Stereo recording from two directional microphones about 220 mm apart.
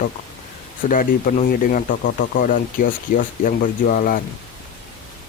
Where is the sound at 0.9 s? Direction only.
35° left (ahead or behind).